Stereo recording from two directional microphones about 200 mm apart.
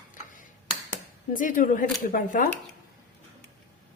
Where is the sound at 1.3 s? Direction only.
40° left (ahead or behind).